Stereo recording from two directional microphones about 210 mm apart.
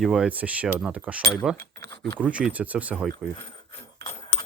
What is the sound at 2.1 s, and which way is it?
Speech, 5° right (ahead or behind).